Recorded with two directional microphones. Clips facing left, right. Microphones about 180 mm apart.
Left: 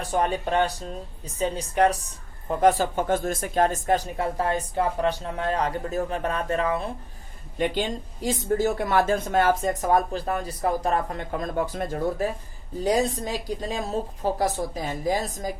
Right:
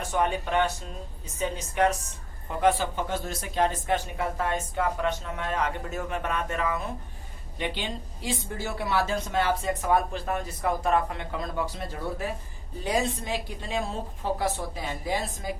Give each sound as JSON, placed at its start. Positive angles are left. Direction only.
{"t": 0.1, "sound": "speech", "side_deg": 35}
{"t": 7.6, "sound": "speech", "side_deg": 45}